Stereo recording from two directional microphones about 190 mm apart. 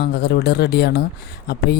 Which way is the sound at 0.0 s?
60° left (ahead or behind).